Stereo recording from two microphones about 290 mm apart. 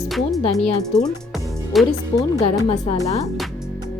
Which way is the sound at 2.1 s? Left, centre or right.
Centre.